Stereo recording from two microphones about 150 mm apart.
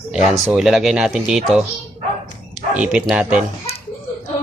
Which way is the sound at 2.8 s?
5° right (ahead or behind).